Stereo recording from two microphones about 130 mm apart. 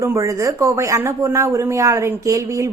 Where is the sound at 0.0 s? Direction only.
25° right (ahead or behind).